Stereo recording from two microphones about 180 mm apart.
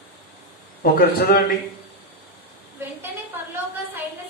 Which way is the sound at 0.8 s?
55° left (ahead or behind).